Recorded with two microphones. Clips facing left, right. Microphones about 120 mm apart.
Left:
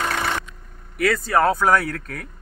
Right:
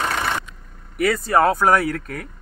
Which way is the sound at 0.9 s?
10° right (ahead or behind).